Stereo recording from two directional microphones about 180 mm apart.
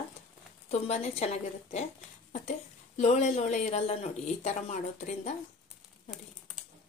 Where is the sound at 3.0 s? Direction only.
40° left (ahead or behind).